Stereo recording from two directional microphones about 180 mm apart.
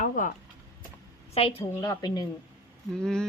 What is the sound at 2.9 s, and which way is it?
Speech, 5° left (ahead or behind).